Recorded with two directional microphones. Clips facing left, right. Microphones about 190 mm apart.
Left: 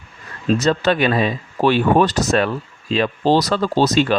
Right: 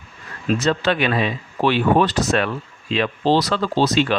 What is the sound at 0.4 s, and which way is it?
Speech, 40° left (ahead or behind).